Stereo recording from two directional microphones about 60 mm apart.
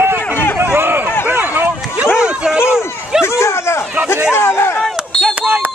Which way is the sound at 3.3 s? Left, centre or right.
Left.